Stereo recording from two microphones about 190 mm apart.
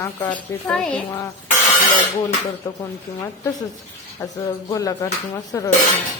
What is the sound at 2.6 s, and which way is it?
Speech, 15° left (ahead or behind).